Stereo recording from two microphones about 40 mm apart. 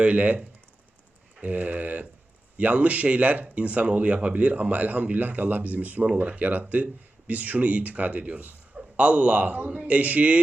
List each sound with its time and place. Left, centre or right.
0.0 s speech: right
1.4 s speech: right